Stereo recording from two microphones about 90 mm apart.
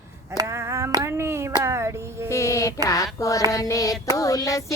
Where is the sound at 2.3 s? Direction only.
35° left (ahead or behind).